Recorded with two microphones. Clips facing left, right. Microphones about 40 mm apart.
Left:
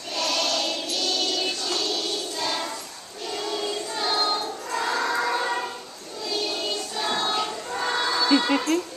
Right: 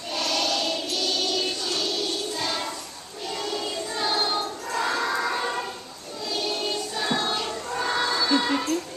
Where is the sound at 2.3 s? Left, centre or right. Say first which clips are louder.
Left 1 dB; centre.